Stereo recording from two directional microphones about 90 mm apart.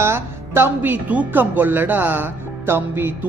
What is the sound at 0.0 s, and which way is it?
Speech, 30° right (ahead or behind).